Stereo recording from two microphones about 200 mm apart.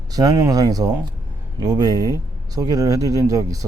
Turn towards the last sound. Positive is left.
turn(degrees=-15)  # may be behind; listen again after turning